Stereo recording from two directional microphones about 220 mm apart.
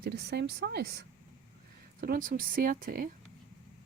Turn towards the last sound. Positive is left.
turn(degrees=-40)  # may be behind; listen again after turning